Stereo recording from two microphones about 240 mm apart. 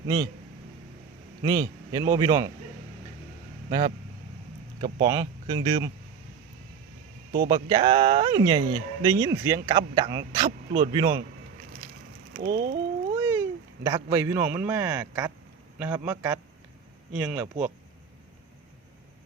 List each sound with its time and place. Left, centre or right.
1.4 s speech: centre
3.7 s speech: centre
5.0 s speech: centre
7.3 s speech: centre
12.4 s ratchet: right
13.1 s a sound: centre
13.8 s speech: centre